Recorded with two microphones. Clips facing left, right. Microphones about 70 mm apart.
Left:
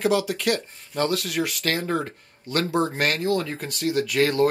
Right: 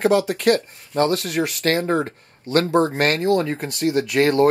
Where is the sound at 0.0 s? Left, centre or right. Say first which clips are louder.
Right 5 dB; right.